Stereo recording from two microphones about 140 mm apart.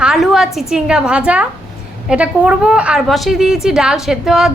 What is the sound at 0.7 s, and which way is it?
A woman's voice, 5° right (ahead or behind).